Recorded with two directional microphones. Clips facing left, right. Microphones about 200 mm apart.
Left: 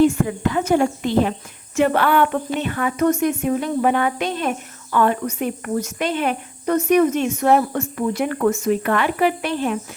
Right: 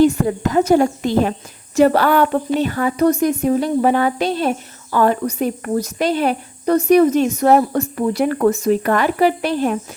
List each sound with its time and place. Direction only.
0.0 s speech: 40° right (ahead or behind)